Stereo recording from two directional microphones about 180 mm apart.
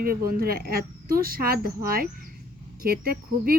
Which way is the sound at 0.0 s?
55° right (ahead or behind).